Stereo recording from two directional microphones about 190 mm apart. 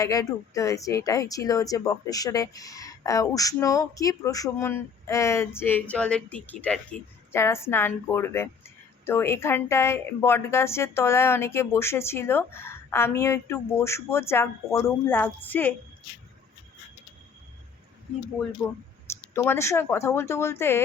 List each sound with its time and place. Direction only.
0.0 s speech: 20° left (ahead or behind)
18.6 s speech: 10° left (ahead or behind)